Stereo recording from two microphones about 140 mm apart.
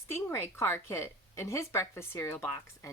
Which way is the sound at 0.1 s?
20° left (ahead or behind).